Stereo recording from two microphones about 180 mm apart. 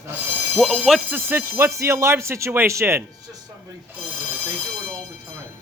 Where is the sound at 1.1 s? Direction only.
10° right (ahead or behind).